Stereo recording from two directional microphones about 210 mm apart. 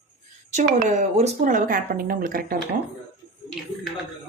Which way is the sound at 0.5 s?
40° right (ahead or behind).